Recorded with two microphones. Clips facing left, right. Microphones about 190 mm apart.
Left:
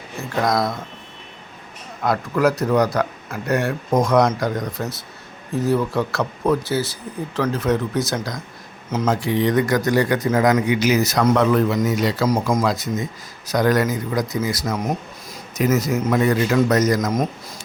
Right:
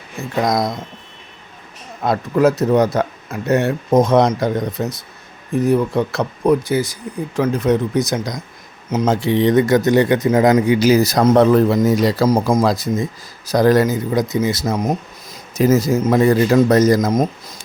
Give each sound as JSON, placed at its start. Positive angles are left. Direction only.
{"t": 0.4, "sound": "speech", "side_deg": -20}
{"t": 2.0, "sound": "a man's voice", "side_deg": -25}